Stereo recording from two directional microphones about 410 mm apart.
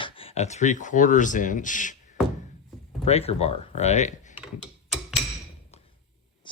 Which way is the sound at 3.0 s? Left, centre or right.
Centre.